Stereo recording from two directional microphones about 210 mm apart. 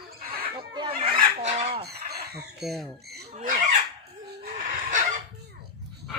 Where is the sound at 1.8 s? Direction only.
50° right (ahead or behind).